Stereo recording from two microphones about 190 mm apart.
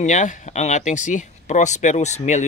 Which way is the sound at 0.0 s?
40° left (ahead or behind).